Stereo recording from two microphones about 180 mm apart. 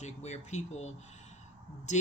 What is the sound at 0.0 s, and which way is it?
Speech, 40° left (ahead or behind).